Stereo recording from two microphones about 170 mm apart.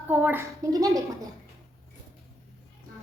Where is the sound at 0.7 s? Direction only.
20° right (ahead or behind).